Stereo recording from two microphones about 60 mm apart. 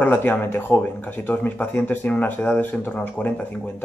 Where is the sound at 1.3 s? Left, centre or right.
Left.